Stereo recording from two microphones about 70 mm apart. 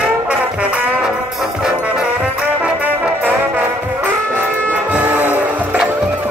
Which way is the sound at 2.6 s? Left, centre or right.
Right.